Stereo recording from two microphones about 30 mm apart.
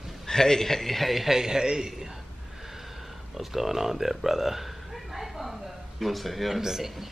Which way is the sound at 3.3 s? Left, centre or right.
Centre.